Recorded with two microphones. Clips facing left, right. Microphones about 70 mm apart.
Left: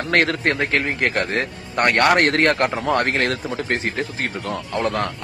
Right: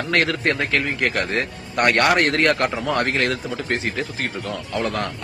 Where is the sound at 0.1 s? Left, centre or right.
Left.